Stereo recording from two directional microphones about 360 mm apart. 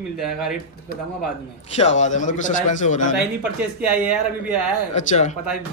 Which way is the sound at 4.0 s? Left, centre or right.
Centre.